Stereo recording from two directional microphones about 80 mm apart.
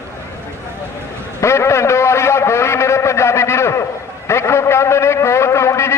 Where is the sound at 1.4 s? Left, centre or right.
Left.